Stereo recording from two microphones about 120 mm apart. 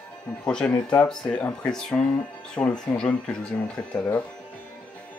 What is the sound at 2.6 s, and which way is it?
Speech, 15° left (ahead or behind).